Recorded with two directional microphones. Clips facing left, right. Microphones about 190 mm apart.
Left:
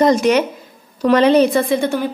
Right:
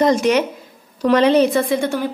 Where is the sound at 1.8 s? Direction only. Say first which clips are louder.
Left 2 dB; 20° left (ahead or behind).